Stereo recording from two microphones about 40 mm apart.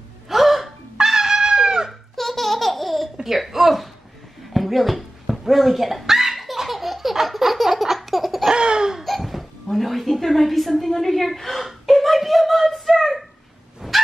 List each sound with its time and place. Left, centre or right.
0.3 s gasp: centre
0.9 s music: centre
1.9 s laughter: centre
3.3 s a sound: centre
8.5 s laughter: right
9.0 s a sound: centre
13.8 s dog: centre